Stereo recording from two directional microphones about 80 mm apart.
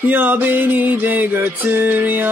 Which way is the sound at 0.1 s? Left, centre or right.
Right.